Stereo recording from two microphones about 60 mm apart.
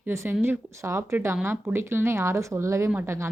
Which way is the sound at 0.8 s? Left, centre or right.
Right.